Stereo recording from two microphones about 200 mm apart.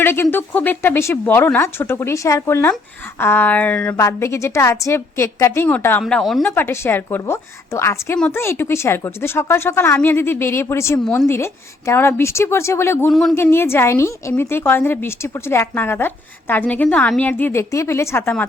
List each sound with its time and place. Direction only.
0.0 s a woman's voice: 10° left (ahead or behind)
11.0 s speech: centre (ahead or behind)
11.3 s a woman's voice: 15° left (ahead or behind)